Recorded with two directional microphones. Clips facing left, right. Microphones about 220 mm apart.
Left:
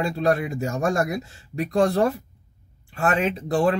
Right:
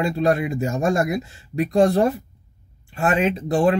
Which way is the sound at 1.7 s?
40° right (ahead or behind).